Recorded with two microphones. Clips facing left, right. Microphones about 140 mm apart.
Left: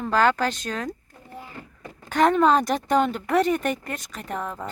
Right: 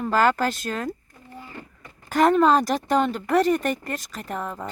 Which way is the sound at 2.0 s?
5° right (ahead or behind).